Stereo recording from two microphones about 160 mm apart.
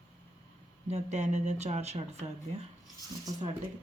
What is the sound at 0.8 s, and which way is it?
Speech, 45° right (ahead or behind).